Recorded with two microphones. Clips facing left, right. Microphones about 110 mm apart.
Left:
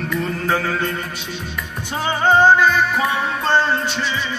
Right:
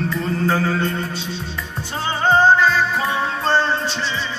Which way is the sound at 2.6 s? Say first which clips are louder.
Left 1 dB; 30° right (ahead or behind).